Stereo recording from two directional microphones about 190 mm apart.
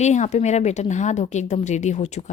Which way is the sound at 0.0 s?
40° left (ahead or behind).